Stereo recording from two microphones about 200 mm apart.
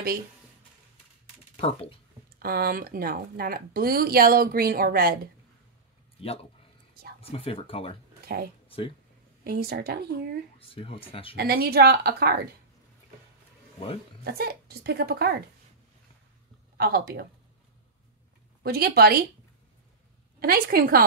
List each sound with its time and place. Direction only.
1.6 s speech: 30° left (ahead or behind)
2.3 s speech: 50° right (ahead or behind)
7.2 s speech: 30° left (ahead or behind)
8.3 s speech: 50° right (ahead or behind)
8.6 s a sound: 25° left (ahead or behind)
9.4 s speech: 50° right (ahead or behind)
10.6 s speech: 30° left (ahead or behind)
11.3 s speech: 50° right (ahead or behind)
14.2 s speech: 50° right (ahead or behind)
16.7 s speech: 50° right (ahead or behind)
18.6 s speech: 50° right (ahead or behind)
20.3 s speech: 50° right (ahead or behind)